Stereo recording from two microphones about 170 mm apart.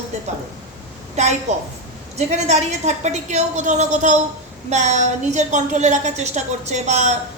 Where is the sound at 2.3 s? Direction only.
40° right (ahead or behind).